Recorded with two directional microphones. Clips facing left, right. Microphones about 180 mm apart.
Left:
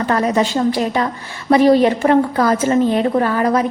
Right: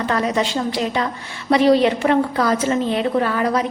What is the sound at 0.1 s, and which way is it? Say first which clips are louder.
A woman's voice: left 5 dB; 45° left (ahead or behind).